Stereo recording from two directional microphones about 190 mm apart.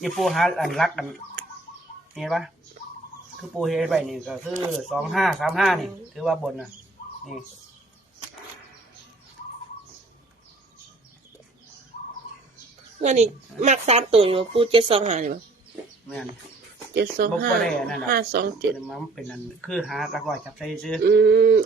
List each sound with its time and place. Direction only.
0.0 s speech: centre (ahead or behind)
3.6 s speech: centre (ahead or behind)
13.0 s speech: 35° right (ahead or behind)
16.9 s speech: 60° right (ahead or behind)
17.6 s speech: centre (ahead or behind)
18.1 s speech: 55° right (ahead or behind)
18.9 s speech: centre (ahead or behind)
21.0 s speech: 60° right (ahead or behind)